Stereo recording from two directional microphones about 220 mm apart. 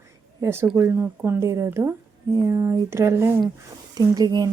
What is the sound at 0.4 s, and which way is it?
A woman's voice, 10° right (ahead or behind).